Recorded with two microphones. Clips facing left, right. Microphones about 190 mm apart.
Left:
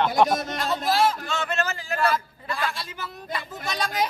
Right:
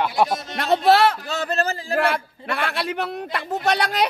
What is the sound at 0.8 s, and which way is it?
Speech, 70° right (ahead or behind).